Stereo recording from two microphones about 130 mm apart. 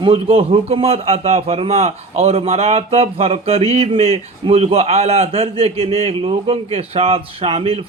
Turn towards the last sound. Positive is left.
turn(degrees=-45)  # may be behind; listen again after turning